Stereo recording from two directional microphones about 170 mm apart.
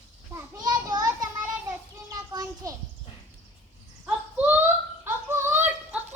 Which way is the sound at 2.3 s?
20° right (ahead or behind).